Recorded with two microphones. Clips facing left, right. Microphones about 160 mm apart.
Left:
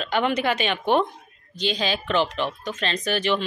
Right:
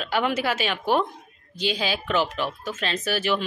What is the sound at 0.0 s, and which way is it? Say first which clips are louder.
A woman's voice: left 2 dB; 5° right (ahead or behind).